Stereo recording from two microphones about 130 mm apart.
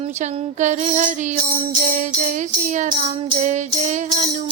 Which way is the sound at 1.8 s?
90° right.